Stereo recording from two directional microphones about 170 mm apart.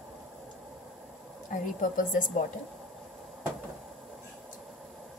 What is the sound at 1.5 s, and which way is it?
Speech, 50° left (ahead or behind).